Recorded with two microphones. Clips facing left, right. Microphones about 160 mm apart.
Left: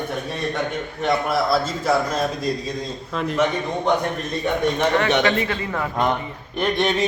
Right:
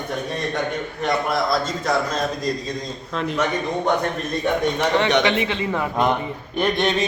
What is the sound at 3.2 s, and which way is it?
Speech, centre (ahead or behind).